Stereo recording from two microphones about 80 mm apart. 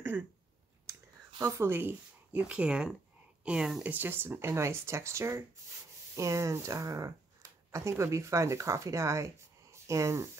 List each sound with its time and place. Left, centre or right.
1.4 s speech: right; by 3.8 s centre
3.8 s speech: right